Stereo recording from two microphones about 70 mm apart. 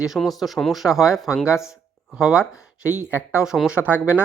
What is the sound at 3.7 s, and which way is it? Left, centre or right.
Speech, right.